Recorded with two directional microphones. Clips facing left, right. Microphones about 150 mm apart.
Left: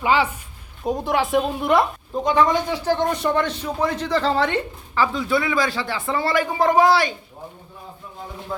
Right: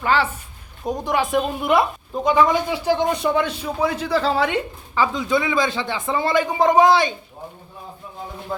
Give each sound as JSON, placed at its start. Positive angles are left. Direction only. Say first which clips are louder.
{"t": 0.0, "sound": "a woman's voice", "louder": "left 1 dB", "side_deg": 10}